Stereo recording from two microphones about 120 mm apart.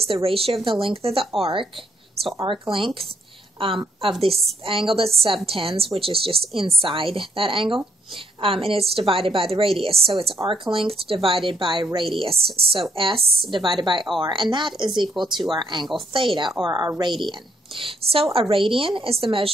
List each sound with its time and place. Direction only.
0.0 s a woman's voice: 55° right (ahead or behind)